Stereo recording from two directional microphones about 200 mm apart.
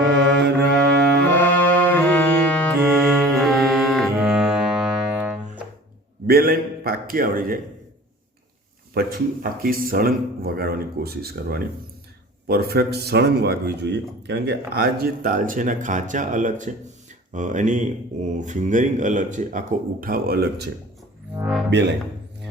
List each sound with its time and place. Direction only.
0.0 s music: 60° right (ahead or behind)
1.4 s music: 10° left (ahead or behind)
6.2 s a sound: 50° right (ahead or behind)
9.0 s speech: 45° right (ahead or behind)
21.7 s speech: 60° right (ahead or behind)